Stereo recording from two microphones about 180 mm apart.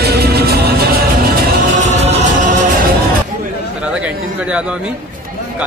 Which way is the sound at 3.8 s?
5° right (ahead or behind).